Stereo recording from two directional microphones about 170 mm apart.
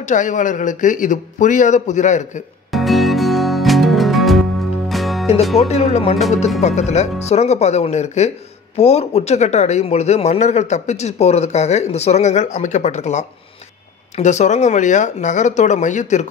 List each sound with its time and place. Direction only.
0.0 s speech: 50° left (ahead or behind)
2.7 s music: centre (ahead or behind)
5.2 s music: 40° left (ahead or behind)
5.6 s speech: 40° left (ahead or behind)